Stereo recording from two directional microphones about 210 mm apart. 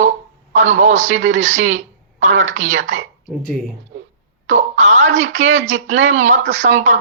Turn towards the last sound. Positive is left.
turn(degrees=-35)  # may be behind; listen again after turning